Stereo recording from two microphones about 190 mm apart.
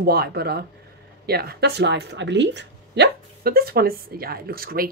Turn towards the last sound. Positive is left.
turn(degrees=-50)  # may be behind; listen again after turning